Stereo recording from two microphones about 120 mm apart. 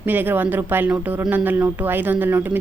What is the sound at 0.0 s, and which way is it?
Speech, 15° right (ahead or behind).